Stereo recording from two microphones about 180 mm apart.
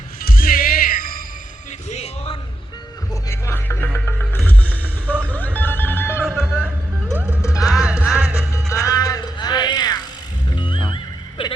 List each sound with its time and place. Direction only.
0.2 s music: 50° left (ahead or behind)
1.9 s music: 35° left (ahead or behind)
3.2 s music: 15° left (ahead or behind)
4.7 s music: 10° right (ahead or behind)
5.5 s telephone bell ringing: 10° left (ahead or behind)
6.4 s music: 5° right (ahead or behind)
8.5 s music: 15° left (ahead or behind)